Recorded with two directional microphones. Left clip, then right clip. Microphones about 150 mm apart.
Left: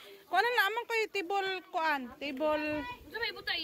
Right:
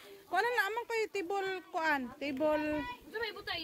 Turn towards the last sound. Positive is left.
turn(degrees=-50)  # may be behind; listen again after turning